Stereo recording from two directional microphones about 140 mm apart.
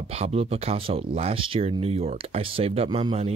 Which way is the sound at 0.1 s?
50° right (ahead or behind).